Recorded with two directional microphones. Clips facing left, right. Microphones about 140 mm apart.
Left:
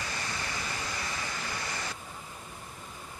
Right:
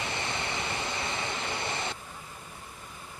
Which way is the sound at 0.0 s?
25° right (ahead or behind).